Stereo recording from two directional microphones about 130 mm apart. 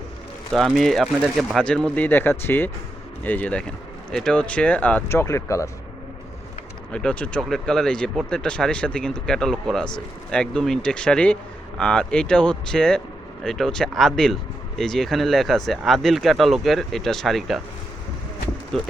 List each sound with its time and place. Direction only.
0.5 s speech: centre (ahead or behind)
5.0 s speech: 20° left (ahead or behind)
6.9 s speech: 10° left (ahead or behind)
18.7 s speech: 5° left (ahead or behind)